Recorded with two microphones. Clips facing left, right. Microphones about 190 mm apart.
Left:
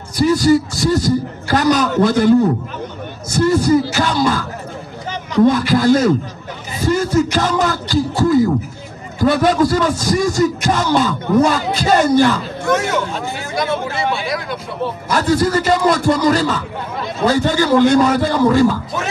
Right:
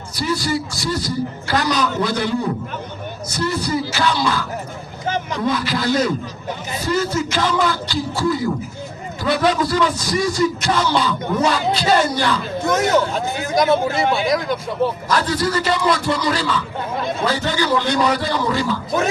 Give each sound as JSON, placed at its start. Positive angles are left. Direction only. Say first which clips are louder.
{"t": 0.2, "sound": "a man's voice", "louder": "left 9 dB", "side_deg": 45}
{"t": 12.7, "sound": "speech", "louder": "right 2 dB", "side_deg": -40}
{"t": 15.1, "sound": "a man's voice", "louder": "left 7 dB", "side_deg": 45}